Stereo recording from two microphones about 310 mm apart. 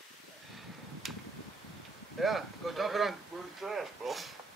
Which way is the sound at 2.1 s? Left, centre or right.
Centre.